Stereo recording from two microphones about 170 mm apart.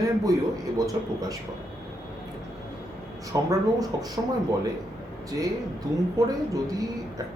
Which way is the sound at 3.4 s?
20° right (ahead or behind).